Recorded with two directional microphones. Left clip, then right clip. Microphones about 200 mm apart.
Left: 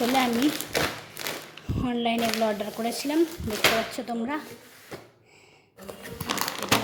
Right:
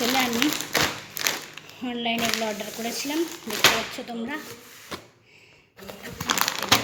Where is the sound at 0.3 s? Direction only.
Centre (ahead or behind).